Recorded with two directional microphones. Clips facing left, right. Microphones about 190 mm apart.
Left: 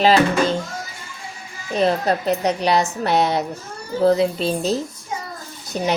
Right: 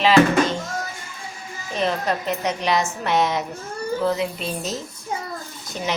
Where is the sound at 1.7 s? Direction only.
35° left (ahead or behind).